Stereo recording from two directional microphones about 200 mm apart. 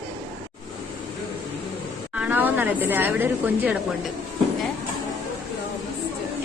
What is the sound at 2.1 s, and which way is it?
Speech, 5° right (ahead or behind).